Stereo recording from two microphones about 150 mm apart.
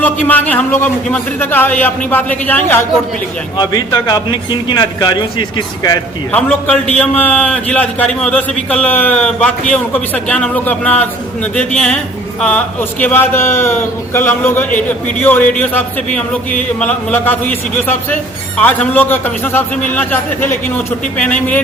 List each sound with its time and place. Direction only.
0.0 s a man's voice: 10° left (ahead or behind)
3.6 s a man's voice: 30° left (ahead or behind)
6.3 s a man's voice: 10° left (ahead or behind)